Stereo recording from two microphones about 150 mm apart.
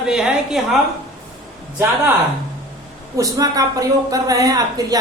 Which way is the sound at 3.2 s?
25° right (ahead or behind).